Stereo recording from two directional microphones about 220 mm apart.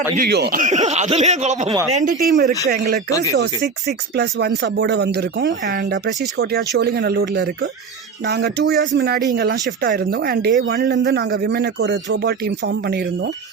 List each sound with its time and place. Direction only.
0.2 s speech: 45° right (ahead or behind); by 1.7 s 30° right (ahead or behind)
2.2 s speech: 45° right (ahead or behind)
3.1 s speech: 15° left (ahead or behind)
3.6 s speech: 50° right (ahead or behind)